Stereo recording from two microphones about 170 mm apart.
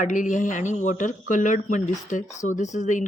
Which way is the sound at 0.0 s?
50° left (ahead or behind).